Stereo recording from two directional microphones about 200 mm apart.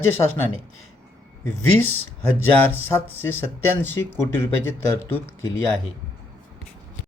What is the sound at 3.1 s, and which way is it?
Speech, 10° left (ahead or behind).